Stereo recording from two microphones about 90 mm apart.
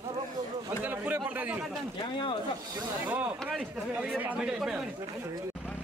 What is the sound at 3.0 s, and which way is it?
Speech, 15° right (ahead or behind).